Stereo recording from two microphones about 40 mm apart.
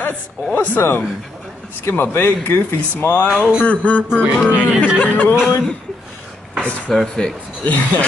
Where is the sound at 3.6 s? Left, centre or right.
Left.